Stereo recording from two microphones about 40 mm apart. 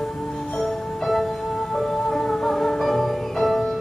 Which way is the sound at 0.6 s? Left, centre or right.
Centre.